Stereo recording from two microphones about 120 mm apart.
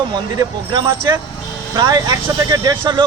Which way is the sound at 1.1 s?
35° right (ahead or behind).